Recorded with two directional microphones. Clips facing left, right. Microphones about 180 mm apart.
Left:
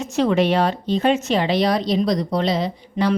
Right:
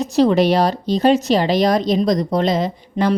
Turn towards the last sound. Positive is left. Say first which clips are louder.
# right 2 dB
turn(degrees=-45)  # may be behind; listen again after turning